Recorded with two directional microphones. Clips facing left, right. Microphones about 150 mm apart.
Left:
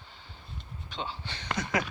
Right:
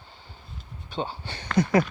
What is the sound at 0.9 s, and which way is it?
Speech, 45° right (ahead or behind).